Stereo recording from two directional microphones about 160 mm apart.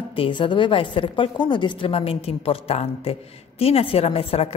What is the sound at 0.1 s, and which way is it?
A woman's voice, 30° left (ahead or behind).